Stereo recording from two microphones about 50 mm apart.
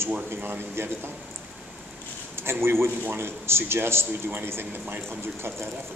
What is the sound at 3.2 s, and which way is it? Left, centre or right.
A man's voice, right.